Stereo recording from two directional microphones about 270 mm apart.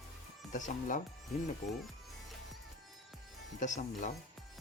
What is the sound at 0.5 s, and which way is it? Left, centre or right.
Speech, left.